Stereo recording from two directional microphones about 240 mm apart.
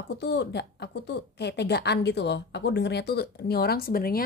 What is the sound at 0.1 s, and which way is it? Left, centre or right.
A woman's voice, left.